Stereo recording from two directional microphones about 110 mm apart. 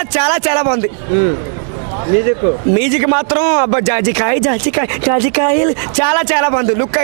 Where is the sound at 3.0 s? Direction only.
20° right (ahead or behind).